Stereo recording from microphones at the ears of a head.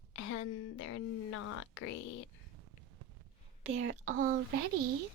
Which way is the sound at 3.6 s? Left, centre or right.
Right.